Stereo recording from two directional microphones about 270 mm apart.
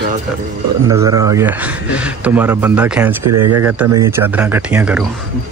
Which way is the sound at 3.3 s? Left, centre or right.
Right.